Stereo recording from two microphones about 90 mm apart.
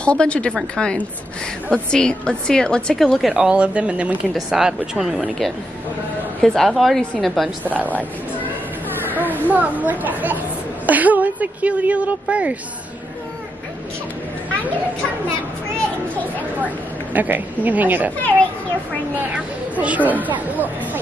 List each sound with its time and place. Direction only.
0.0 s a woman's voice: 10° left (ahead or behind)
3.4 s a woman's voice: 15° right (ahead or behind)
7.6 s speech: 20° right (ahead or behind)
9.1 s a woman's voice: 20° right (ahead or behind)
16.6 s speech: 20° right (ahead or behind)
19.3 s speech: 15° right (ahead or behind)